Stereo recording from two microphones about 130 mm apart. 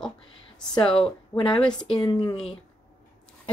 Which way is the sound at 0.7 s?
40° left (ahead or behind).